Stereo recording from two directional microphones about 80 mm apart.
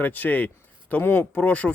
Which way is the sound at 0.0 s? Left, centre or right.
Left.